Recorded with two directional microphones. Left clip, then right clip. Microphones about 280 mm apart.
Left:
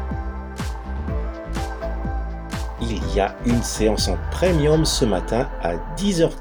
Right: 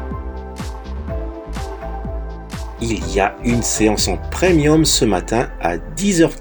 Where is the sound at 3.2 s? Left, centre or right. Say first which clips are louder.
Right 4 dB; left.